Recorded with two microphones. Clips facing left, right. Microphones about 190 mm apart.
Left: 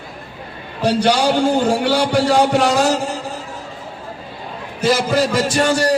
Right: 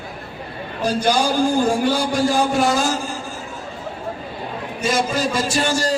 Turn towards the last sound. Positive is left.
turn(degrees=65)  # may be behind; listen again after turning